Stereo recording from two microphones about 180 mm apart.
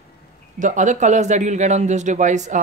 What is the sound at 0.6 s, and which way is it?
Speech, 45° right (ahead or behind).